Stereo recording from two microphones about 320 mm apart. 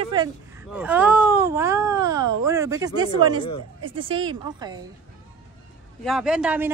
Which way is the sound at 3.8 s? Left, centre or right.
Right.